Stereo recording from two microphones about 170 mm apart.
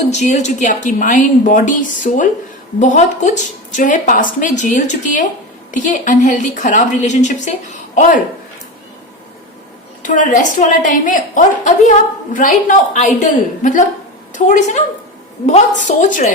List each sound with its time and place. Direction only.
0.1 s a woman's voice: 45° left (ahead or behind)
10.0 s a woman's voice: 50° left (ahead or behind)